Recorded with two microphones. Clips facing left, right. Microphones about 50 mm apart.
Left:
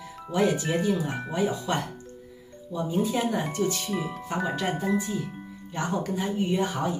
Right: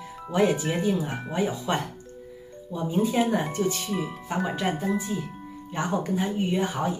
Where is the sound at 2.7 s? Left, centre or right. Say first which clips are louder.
Right 2 dB; centre.